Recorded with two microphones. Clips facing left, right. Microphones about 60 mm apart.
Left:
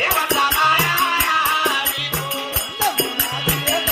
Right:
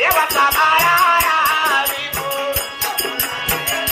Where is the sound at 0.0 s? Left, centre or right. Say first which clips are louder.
Right 4 dB; right.